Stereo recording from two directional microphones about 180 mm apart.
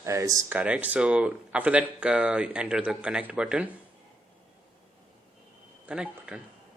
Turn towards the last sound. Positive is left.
turn(degrees=-5)  # may be behind; listen again after turning